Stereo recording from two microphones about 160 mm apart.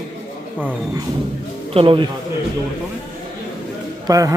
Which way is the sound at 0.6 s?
10° right (ahead or behind).